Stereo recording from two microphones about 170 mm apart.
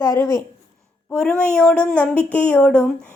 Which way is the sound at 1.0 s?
5° left (ahead or behind).